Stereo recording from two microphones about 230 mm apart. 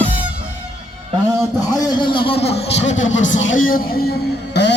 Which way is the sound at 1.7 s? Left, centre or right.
Centre.